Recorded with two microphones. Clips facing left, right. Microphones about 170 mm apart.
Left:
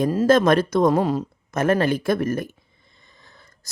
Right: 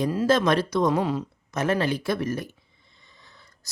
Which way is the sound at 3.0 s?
50° left (ahead or behind).